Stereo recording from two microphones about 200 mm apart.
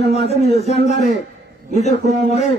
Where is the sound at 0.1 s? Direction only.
30° left (ahead or behind).